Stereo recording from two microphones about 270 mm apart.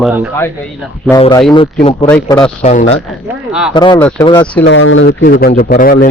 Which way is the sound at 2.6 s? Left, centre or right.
Left.